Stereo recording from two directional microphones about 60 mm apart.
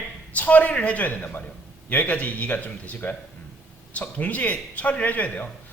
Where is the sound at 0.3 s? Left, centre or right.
Left.